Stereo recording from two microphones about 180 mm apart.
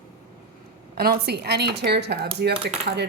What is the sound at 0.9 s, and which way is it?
Speech, 60° right (ahead or behind).